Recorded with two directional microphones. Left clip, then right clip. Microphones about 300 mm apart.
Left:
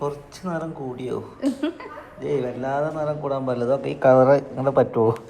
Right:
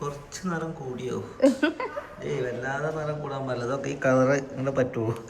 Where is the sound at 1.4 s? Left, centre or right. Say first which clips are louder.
Right 6 dB; right.